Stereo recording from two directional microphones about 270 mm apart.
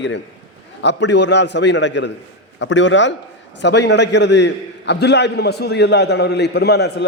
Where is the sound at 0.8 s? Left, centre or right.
Left.